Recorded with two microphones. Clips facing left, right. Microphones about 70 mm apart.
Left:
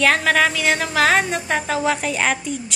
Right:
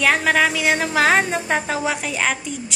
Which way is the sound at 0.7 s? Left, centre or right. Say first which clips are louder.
Even; right.